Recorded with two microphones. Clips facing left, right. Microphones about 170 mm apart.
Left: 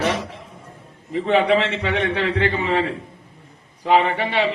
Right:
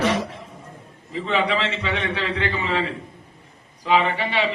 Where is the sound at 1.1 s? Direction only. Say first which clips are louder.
Left 6 dB; 55° left (ahead or behind).